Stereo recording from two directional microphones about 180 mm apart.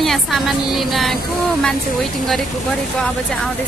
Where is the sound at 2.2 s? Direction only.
Centre (ahead or behind).